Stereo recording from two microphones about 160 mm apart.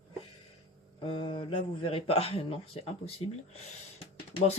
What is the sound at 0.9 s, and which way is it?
Speech, 35° left (ahead or behind).